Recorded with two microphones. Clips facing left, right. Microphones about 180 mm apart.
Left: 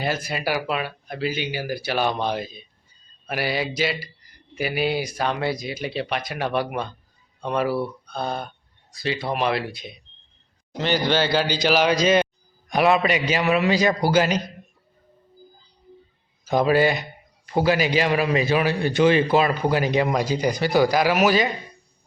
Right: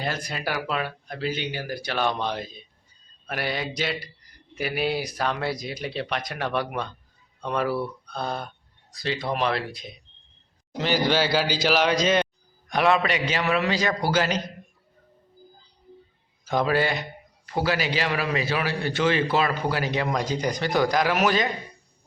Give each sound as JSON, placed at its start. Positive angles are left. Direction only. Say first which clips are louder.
{"t": 0.0, "sound": "a man's voice", "louder": "left 4 dB", "side_deg": 5}
{"t": 16.5, "sound": "a man's voice", "louder": "left 4 dB", "side_deg": 15}